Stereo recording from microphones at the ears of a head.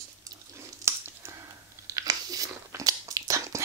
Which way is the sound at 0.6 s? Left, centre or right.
Right.